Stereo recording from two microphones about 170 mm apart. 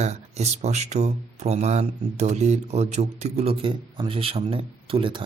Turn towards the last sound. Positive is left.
turn(degrees=-30)  # may be behind; listen again after turning